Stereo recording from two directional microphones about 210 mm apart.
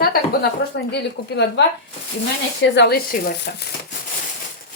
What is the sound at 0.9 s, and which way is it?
Speech, 50° left (ahead or behind).